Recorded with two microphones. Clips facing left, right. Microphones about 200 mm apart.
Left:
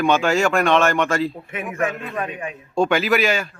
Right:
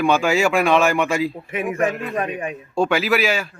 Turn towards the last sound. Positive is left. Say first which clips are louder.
# even
turn(degrees=-5)  # may be behind; listen again after turning